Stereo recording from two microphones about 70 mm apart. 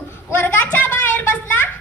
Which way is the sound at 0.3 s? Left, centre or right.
Left.